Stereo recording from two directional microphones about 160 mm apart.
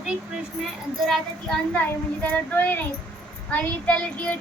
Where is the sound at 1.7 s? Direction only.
10° left (ahead or behind).